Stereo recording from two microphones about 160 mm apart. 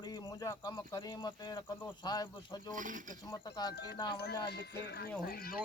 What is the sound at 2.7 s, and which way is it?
Speech, 55° right (ahead or behind).